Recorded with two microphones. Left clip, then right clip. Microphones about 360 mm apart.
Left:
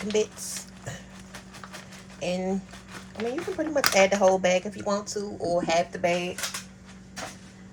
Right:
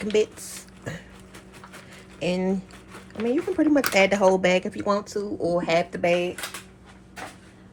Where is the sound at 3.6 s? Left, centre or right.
Right.